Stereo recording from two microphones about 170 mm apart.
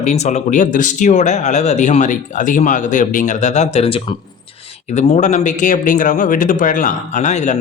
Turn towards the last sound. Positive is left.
turn(degrees=45)  # may be behind; listen again after turning